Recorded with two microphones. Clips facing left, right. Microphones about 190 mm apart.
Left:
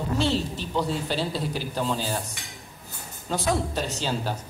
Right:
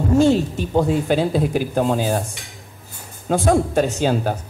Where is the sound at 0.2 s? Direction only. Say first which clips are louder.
Right 9 dB; 50° right (ahead or behind).